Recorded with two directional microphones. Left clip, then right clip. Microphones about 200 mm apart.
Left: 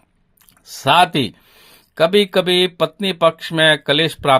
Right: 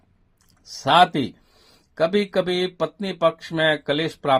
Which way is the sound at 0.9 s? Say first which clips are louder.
Left 3 dB; 35° left (ahead or behind).